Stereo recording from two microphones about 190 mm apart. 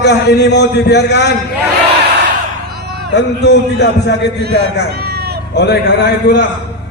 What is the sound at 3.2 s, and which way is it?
A man's voice, 65° left (ahead or behind).